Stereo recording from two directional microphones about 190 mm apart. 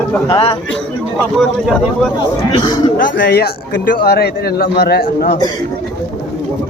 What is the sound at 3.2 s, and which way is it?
A man's voice, 55° left (ahead or behind).